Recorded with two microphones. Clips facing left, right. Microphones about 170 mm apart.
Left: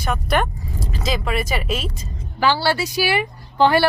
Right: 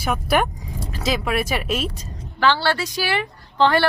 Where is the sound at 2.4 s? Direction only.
10° left (ahead or behind).